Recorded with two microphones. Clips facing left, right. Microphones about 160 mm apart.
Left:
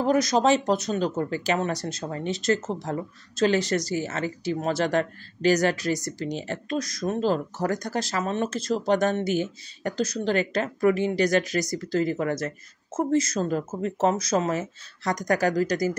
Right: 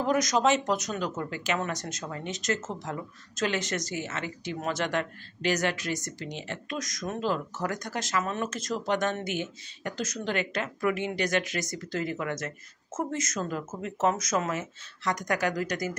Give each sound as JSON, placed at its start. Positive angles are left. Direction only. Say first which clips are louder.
{"t": 0.0, "sound": "speech", "louder": "left 4 dB", "side_deg": 35}